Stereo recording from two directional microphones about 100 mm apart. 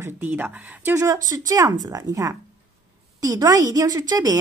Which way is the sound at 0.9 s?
35° right (ahead or behind).